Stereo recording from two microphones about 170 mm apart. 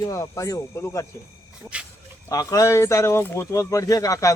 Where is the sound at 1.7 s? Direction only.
5° right (ahead or behind).